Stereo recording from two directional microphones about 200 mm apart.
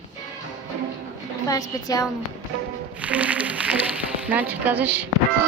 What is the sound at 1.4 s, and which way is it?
Speech, 20° left (ahead or behind).